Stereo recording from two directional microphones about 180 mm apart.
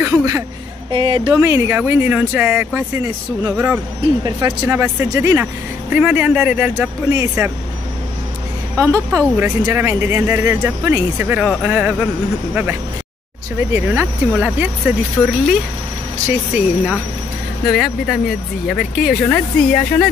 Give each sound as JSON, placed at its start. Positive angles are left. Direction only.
{"t": 0.0, "sound": "a sound", "side_deg": -15}
{"t": 0.9, "sound": "a woman's voice", "side_deg": -30}
{"t": 1.4, "sound": "speech", "side_deg": -15}
{"t": 8.7, "sound": "speech", "side_deg": -15}
{"t": 13.7, "sound": "speech", "side_deg": -10}
{"t": 15.2, "sound": "speech", "side_deg": 5}
{"t": 16.3, "sound": "speech", "side_deg": -5}